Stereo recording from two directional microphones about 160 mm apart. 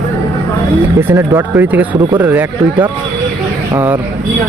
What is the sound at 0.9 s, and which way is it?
Speech, 15° right (ahead or behind).